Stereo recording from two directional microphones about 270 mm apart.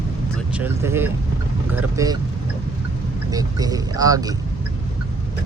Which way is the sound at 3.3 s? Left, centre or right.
Centre.